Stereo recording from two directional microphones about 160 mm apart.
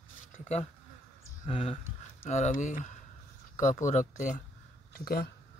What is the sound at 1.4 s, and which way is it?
Speech, 40° left (ahead or behind).